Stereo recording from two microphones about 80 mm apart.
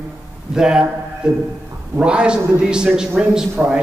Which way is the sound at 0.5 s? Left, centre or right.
Centre.